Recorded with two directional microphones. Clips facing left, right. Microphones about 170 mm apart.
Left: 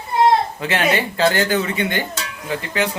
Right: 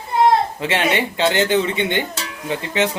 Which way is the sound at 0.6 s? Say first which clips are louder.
Even; 25° right (ahead or behind).